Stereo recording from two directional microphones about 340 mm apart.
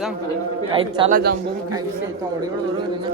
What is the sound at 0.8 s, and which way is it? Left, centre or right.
Speech, centre.